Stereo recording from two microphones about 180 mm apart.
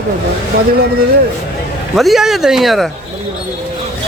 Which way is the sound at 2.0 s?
Centre (ahead or behind).